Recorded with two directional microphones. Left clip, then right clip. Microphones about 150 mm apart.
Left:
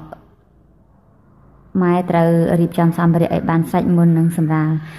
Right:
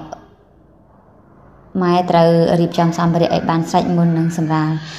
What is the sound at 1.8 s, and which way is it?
A woman's voice, 20° left (ahead or behind).